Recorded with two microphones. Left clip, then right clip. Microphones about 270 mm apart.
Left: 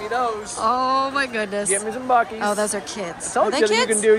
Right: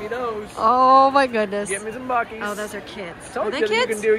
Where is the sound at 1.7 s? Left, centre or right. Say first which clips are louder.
Left 5 dB; left.